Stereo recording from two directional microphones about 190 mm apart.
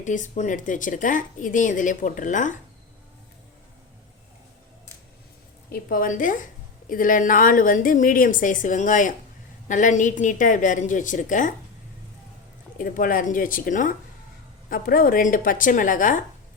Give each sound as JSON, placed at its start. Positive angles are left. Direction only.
{"t": 0.0, "sound": "speech", "side_deg": 40}
{"t": 5.7, "sound": "speech", "side_deg": 45}
{"t": 12.8, "sound": "speech", "side_deg": 45}